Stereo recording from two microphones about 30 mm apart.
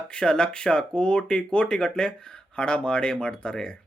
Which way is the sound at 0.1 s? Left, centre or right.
Left.